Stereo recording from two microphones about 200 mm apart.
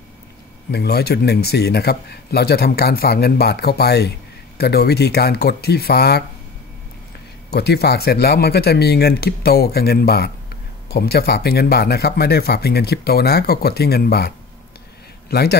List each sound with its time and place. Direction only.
0.7 s speech: 55° left (ahead or behind)
7.5 s a man's voice: 55° left (ahead or behind)